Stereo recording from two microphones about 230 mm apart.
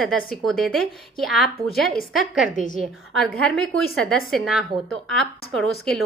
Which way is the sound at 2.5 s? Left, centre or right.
Left.